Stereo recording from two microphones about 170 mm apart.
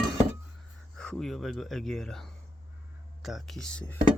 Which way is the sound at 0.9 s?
5° left (ahead or behind).